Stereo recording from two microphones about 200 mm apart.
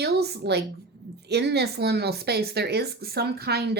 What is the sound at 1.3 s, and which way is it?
Speech, 55° right (ahead or behind).